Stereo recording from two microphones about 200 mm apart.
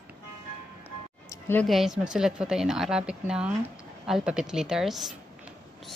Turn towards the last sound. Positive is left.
turn(degrees=0)  # may be behind; listen again after turning